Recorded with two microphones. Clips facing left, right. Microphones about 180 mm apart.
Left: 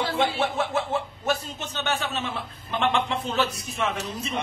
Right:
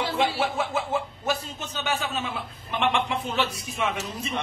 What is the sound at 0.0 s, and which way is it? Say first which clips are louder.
A man's voice: even; 5° right (ahead or behind).